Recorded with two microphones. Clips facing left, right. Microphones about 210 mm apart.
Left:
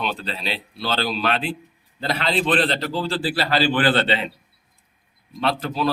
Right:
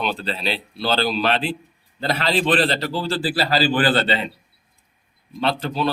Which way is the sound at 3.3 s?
35° right (ahead or behind).